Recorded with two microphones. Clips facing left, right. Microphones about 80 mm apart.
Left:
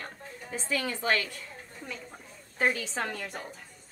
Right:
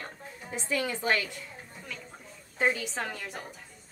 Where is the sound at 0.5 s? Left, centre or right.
Centre.